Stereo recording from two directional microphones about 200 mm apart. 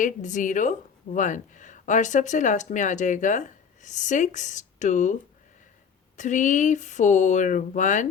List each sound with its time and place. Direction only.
0.0 s speech: 40° left (ahead or behind)
6.1 s speech: 40° left (ahead or behind)